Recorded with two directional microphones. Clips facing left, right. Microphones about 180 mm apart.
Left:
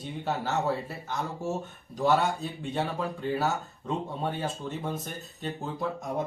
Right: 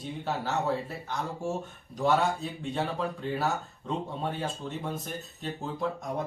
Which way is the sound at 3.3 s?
Centre (ahead or behind).